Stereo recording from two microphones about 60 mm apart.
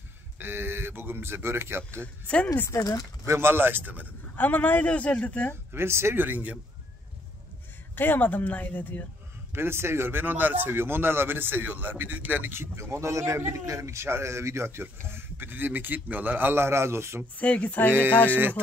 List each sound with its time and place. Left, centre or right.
0.4 s speech: right
2.2 s speech: left
2.7 s speech: left
3.3 s speech: right
4.4 s speech: left
5.7 s speech: right
6.2 s speech: right
7.9 s speech: left
9.5 s speech: right
12.5 s speech: right
17.4 s speech: left